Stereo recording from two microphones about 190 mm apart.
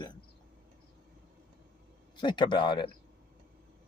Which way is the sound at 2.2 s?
25° left (ahead or behind).